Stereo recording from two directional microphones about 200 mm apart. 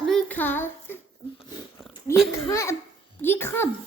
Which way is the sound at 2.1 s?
15° left (ahead or behind).